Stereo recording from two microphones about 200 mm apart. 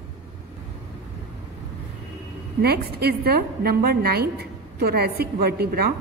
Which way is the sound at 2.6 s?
50° right (ahead or behind).